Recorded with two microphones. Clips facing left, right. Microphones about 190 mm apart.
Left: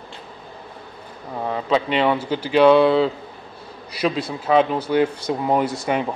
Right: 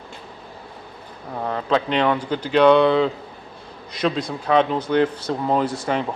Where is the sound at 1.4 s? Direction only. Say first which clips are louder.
Left 1 dB; 5° left (ahead or behind).